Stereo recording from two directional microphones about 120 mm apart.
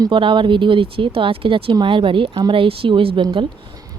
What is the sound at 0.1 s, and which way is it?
Speech, 45° right (ahead or behind).